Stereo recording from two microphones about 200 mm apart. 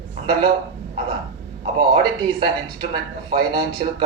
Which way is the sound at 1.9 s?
20° right (ahead or behind).